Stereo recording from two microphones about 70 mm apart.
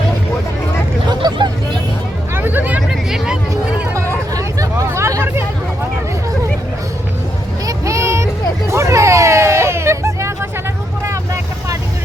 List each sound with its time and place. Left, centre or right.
1.2 s vehicle: right
2.3 s hubbub: right
2.9 s hubbub: centre
3.9 s hubbub: right
7.7 s vehicle: right
8.7 s hubbub: right